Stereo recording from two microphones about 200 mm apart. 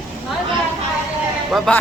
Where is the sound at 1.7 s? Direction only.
5° left (ahead or behind).